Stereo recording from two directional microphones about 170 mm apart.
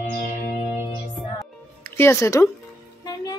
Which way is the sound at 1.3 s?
15° left (ahead or behind).